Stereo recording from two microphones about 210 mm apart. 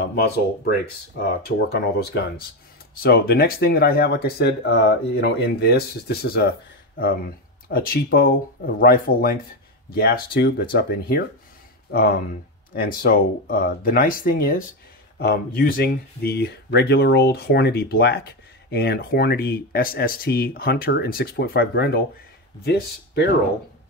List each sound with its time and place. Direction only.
1.7 s speech: 50° left (ahead or behind)
7.6 s speech: 45° left (ahead or behind)